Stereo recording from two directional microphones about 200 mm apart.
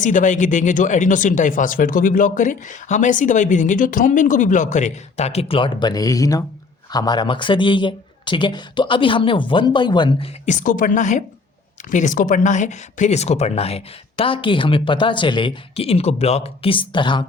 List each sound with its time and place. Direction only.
0.0 s speech: 40° left (ahead or behind); by 10.2 s 20° left (ahead or behind)
10.4 s speech: 40° left (ahead or behind); by 17.2 s 25° left (ahead or behind)